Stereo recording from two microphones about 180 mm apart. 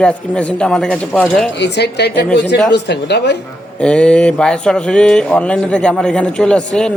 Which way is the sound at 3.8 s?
5° left (ahead or behind).